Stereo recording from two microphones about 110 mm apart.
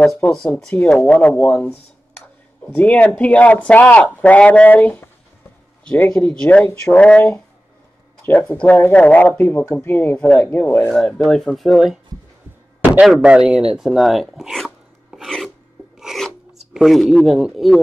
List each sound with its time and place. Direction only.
0.0 s speech: 5° left (ahead or behind)
8.3 s speech: 15° left (ahead or behind)
10.9 s speech: centre (ahead or behind)
13.0 s speech: 5° right (ahead or behind)
16.0 s filing: 5° right (ahead or behind)
16.5 s speech: 5° right (ahead or behind)